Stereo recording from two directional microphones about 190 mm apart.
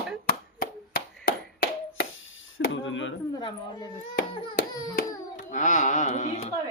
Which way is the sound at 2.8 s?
85° left.